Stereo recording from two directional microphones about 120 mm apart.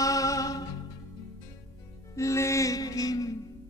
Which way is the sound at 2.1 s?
25° left (ahead or behind).